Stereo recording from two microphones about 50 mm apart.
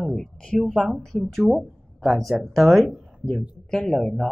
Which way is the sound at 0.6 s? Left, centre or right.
Centre.